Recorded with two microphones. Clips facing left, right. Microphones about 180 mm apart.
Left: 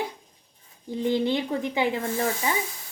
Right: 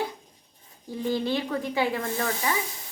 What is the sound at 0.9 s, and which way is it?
Speech, 20° left (ahead or behind).